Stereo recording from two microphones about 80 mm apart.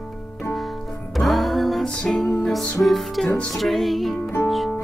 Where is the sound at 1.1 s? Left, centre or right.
Centre.